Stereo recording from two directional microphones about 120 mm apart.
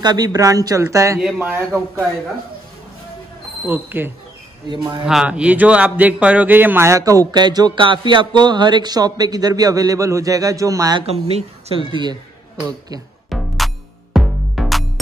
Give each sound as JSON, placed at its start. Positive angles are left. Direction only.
{"t": 0.0, "sound": "speech", "side_deg": -35}
{"t": 1.2, "sound": "speech", "side_deg": -15}
{"t": 3.6, "sound": "speech", "side_deg": -15}
{"t": 4.6, "sound": "speech", "side_deg": -40}
{"t": 5.0, "sound": "speech", "side_deg": -5}
{"t": 11.0, "sound": "speech", "side_deg": -55}
{"t": 13.3, "sound": "music", "side_deg": 0}